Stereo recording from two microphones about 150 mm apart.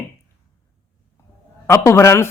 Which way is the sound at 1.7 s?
20° left (ahead or behind).